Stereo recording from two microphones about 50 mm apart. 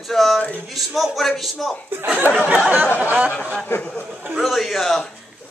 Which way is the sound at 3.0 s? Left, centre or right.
Right.